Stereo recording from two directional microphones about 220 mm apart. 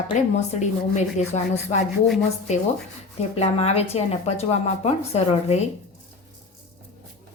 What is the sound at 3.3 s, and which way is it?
A woman's voice, 30° left (ahead or behind).